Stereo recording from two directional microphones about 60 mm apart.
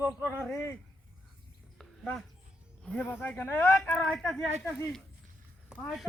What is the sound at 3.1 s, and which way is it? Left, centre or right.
Speech, left.